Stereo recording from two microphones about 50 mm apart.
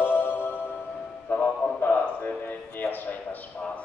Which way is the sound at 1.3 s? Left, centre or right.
Left.